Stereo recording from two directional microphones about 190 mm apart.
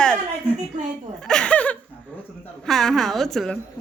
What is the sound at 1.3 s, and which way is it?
A man's voice, 5° left (ahead or behind).